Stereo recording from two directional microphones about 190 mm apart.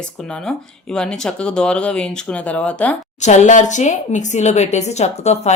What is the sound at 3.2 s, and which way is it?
A woman's voice, 40° left (ahead or behind).